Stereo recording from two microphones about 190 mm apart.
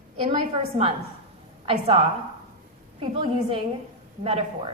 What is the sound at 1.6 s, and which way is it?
A woman's voice, 30° right (ahead or behind).